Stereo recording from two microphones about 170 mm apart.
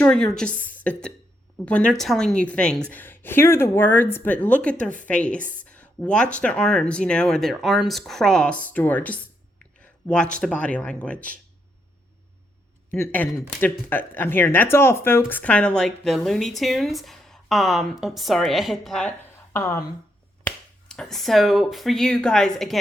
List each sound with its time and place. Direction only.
0.0 s a sound: 5° left (ahead or behind)
0.3 s speech: 10° left (ahead or behind)
12.9 s speech: 10° left (ahead or behind)
19.5 s speech: 15° left (ahead or behind)
20.4 s speech: 5° left (ahead or behind)